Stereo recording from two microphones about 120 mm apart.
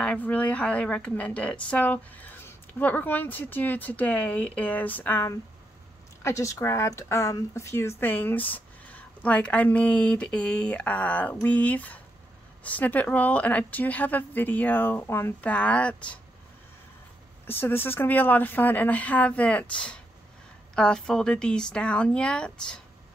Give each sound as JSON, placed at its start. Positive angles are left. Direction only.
{"t": 0.0, "sound": "speech", "side_deg": 10}
{"t": 6.2, "sound": "speech", "side_deg": 25}
{"t": 17.5, "sound": "speech", "side_deg": 20}